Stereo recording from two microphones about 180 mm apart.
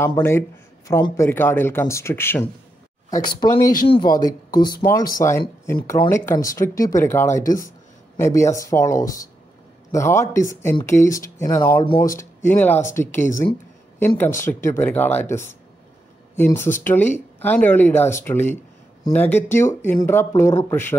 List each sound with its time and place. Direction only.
0.0 s speech: 15° left (ahead or behind)
3.2 s speech: 20° left (ahead or behind)
4.6 s speech: 55° left (ahead or behind)
4.9 s speech: 20° left (ahead or behind)